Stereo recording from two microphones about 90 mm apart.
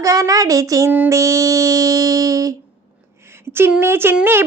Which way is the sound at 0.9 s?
20° right (ahead or behind).